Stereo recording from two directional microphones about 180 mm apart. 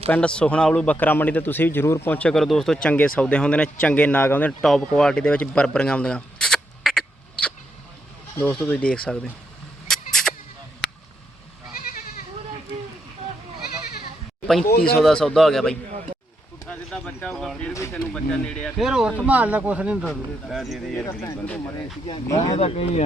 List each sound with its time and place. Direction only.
0.1 s a man's voice: 5° left (ahead or behind)
9.8 s vehicle: centre (ahead or behind)
11.7 s goat: 55° left (ahead or behind)
14.7 s speech: 60° left (ahead or behind)
14.9 s speech: centre (ahead or behind)
21.2 s a man's voice: 10° left (ahead or behind)
22.0 s speech: 30° left (ahead or behind)